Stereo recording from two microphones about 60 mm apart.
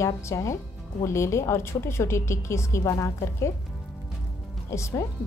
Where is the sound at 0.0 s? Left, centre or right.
Left.